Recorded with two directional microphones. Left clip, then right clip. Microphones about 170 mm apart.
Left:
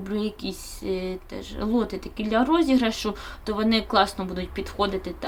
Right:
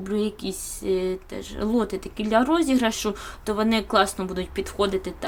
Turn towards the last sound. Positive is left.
turn(degrees=-15)  # may be behind; listen again after turning